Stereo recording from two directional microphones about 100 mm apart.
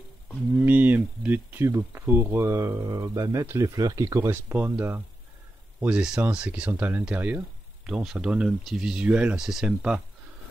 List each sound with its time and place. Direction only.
0.6 s speech: 15° right (ahead or behind)
5.8 s speech: 10° right (ahead or behind)